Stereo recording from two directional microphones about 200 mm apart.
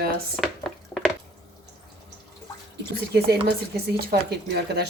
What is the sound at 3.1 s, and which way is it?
Speech, 55° right (ahead or behind).